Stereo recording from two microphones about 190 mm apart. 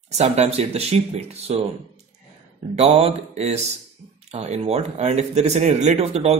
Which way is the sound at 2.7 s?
35° right (ahead or behind).